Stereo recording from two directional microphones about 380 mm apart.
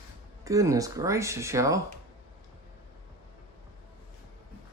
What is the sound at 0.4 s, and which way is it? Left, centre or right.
Speech, centre.